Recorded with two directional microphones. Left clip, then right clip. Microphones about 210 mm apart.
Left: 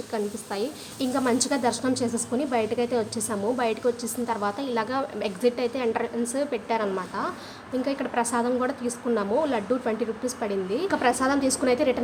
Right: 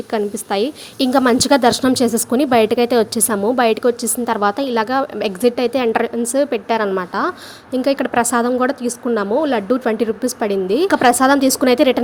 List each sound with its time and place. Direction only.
0.1 s a woman's voice: 40° right (ahead or behind)